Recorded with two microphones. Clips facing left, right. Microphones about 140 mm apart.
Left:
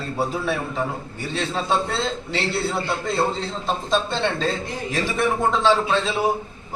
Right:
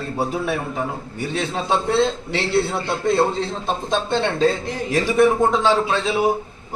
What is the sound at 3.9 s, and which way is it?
A man's voice, 15° right (ahead or behind).